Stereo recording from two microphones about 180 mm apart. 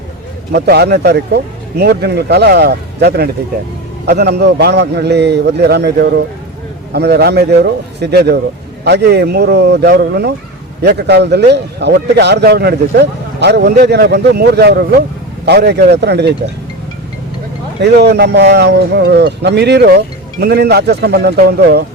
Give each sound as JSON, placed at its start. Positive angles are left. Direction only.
{"t": 0.5, "sound": "a man's voice", "side_deg": -65}
{"t": 17.7, "sound": "a man's voice", "side_deg": -70}